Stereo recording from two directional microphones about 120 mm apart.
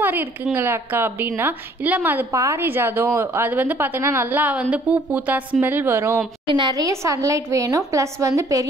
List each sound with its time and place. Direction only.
0.0 s a woman's voice: 15° right (ahead or behind)
6.4 s speech: 40° right (ahead or behind)